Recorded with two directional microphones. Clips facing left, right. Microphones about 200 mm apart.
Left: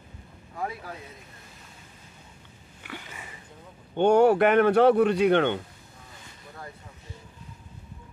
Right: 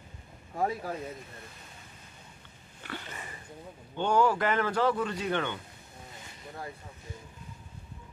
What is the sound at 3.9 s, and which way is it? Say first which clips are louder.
Speech: left 7 dB; 60° left (ahead or behind).